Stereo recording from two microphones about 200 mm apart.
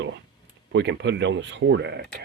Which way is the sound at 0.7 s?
60° right (ahead or behind).